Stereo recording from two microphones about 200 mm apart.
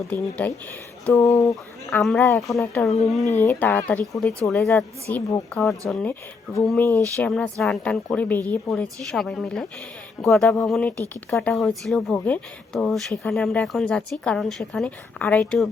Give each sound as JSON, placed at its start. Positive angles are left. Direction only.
{"t": 0.1, "sound": "speech", "side_deg": 5}
{"t": 2.0, "sound": "a woman's voice", "side_deg": 0}